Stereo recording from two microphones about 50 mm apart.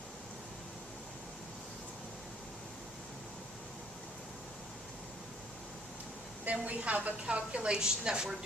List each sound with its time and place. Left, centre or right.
6.4 s a woman's voice: right